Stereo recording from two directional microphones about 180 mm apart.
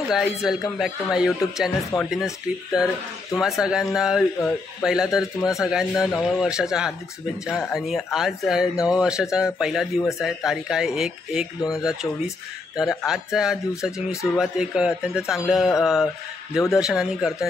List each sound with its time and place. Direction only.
0.2 s speech: centre (ahead or behind)
12.7 s speech: 5° right (ahead or behind)